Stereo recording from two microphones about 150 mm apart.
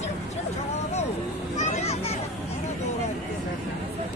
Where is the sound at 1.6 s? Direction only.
45° left (ahead or behind).